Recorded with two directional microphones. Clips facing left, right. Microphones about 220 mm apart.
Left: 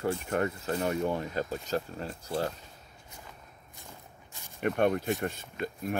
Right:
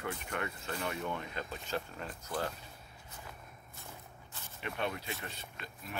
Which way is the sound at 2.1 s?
30° left (ahead or behind).